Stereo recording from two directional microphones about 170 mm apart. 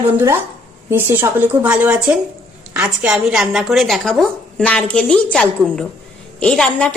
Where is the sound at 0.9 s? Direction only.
15° right (ahead or behind).